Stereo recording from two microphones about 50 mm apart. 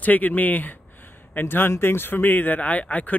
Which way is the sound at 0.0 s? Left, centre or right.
Left.